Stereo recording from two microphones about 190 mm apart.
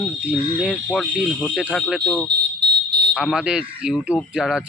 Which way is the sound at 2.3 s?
60° right (ahead or behind).